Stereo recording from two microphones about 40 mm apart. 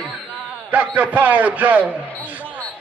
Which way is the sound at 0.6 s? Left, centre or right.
Right.